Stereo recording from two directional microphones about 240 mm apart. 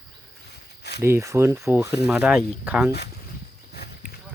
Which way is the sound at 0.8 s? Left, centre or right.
Left.